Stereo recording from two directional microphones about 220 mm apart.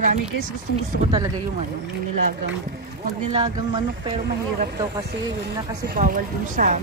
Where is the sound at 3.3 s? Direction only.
25° right (ahead or behind).